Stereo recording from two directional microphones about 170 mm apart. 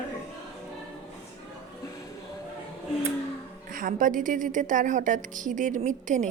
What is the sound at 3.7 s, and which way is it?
A woman's voice, 50° right (ahead or behind).